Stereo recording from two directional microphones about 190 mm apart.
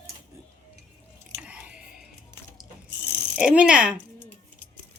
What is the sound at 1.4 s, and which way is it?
Chewing, 5° right (ahead or behind).